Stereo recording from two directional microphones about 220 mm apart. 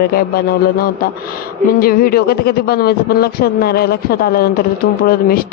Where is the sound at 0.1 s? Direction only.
45° left (ahead or behind).